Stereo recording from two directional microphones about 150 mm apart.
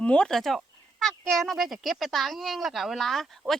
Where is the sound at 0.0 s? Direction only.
5° left (ahead or behind).